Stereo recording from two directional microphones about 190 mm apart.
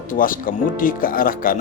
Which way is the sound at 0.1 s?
45° left (ahead or behind).